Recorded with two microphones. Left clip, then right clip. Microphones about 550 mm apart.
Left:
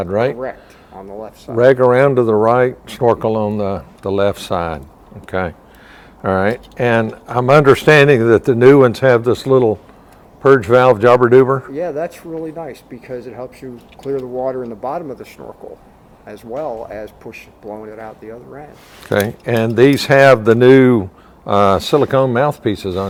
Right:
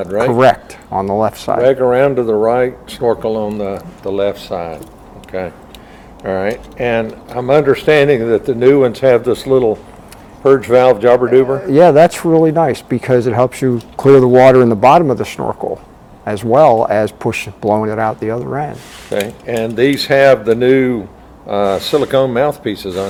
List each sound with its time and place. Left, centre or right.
0.0 s speech: left
0.9 s speech: right
1.6 s speech: left
11.7 s speech: right
19.1 s speech: left